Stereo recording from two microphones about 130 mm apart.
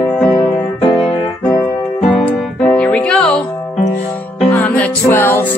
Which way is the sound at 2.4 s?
5° left (ahead or behind).